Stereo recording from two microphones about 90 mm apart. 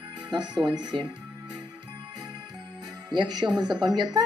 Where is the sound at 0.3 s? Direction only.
55° right (ahead or behind).